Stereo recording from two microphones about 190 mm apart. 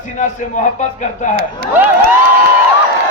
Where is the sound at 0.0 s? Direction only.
40° left (ahead or behind).